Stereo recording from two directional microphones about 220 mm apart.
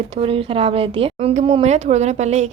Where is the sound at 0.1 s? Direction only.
25° right (ahead or behind).